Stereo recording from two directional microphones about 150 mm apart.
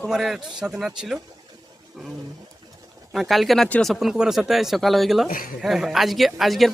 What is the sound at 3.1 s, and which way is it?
Speech, centre (ahead or behind).